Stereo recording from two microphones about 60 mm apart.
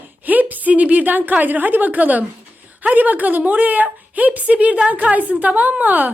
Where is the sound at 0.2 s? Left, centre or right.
Right.